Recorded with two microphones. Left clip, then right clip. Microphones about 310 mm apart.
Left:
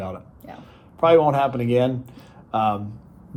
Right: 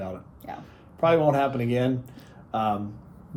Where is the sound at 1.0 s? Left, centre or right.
Centre.